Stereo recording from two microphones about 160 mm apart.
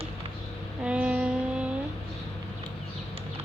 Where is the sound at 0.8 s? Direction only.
5° right (ahead or behind).